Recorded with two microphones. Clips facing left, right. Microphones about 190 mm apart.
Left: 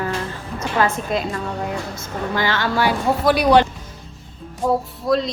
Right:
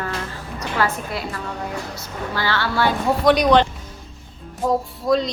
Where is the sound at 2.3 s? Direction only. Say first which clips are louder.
Left 2 dB; 20° left (ahead or behind).